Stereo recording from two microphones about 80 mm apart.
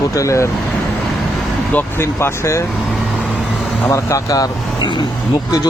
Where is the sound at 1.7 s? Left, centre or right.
Left.